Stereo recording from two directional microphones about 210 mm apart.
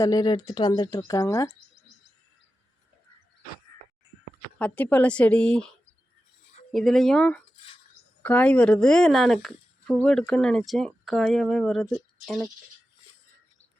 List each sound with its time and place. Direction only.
0.0 s speech: 20° left (ahead or behind)
4.5 s speech: 5° left (ahead or behind)
6.7 s speech: centre (ahead or behind)
7.5 s a sound: 25° left (ahead or behind)
8.2 s speech: 5° left (ahead or behind)